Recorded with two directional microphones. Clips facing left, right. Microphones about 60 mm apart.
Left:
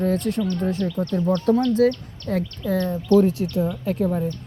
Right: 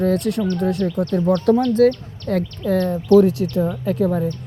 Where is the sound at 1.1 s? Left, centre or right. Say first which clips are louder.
Right 3 dB; right.